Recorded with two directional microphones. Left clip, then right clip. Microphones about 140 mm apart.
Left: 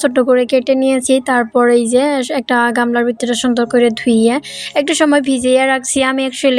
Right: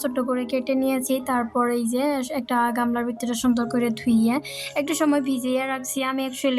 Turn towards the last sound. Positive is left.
turn(degrees=40)  # may be behind; listen again after turning